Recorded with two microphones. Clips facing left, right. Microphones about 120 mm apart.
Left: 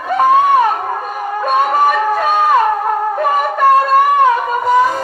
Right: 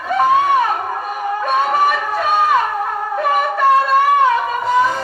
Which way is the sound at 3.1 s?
45° left (ahead or behind).